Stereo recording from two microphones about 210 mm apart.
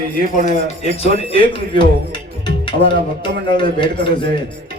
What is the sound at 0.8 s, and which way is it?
Speech, 30° left (ahead or behind).